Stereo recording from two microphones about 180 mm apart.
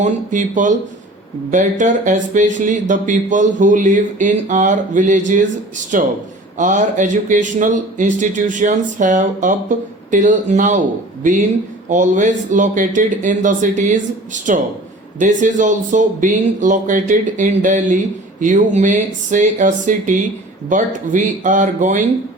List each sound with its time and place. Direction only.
0.0 s speech: 45° right (ahead or behind)
11.9 s speech: 45° right (ahead or behind)